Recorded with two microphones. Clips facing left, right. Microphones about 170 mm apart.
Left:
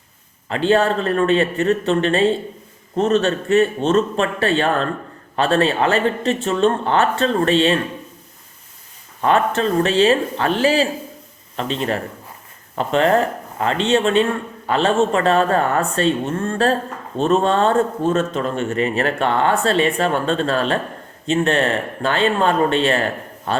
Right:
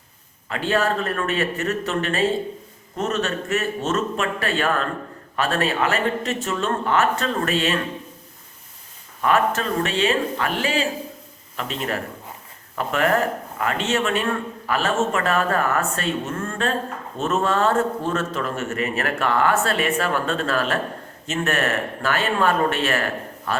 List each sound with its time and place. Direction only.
0.4 s speech: 30° left (ahead or behind)
9.2 s speech: 30° left (ahead or behind)